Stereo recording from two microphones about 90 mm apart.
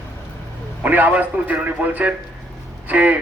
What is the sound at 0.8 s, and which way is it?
A man's voice, 15° right (ahead or behind).